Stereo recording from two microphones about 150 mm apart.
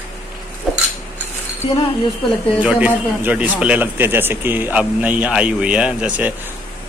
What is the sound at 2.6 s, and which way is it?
A man's voice, 5° right (ahead or behind).